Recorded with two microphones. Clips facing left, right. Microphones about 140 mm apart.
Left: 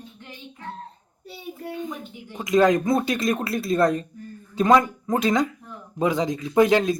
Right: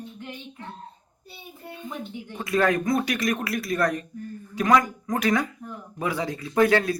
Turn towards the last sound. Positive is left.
turn(degrees=20)  # may be behind; listen again after turning